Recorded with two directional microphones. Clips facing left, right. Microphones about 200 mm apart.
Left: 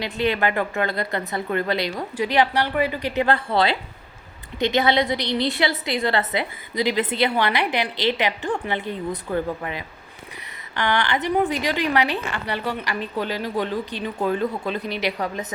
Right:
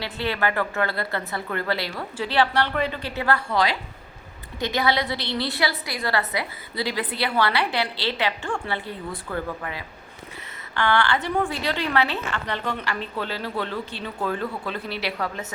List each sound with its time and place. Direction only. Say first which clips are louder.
0.0 s a woman's voice: left 4 dB; 15° left (ahead or behind)
4.6 s a woman's voice: left 4 dB; 20° left (ahead or behind)